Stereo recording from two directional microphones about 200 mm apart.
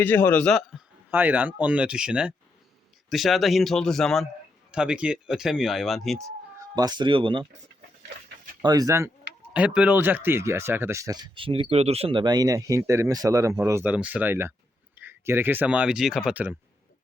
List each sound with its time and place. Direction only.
0.0 s a man's voice: 10° left (ahead or behind)
1.1 s speech: 10° right (ahead or behind)
6.7 s speech: 20° right (ahead or behind)
8.6 s speech: 20° right (ahead or behind)
9.5 s speech: 5° right (ahead or behind)